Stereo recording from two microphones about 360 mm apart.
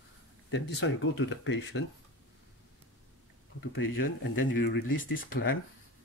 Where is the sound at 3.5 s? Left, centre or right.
Left.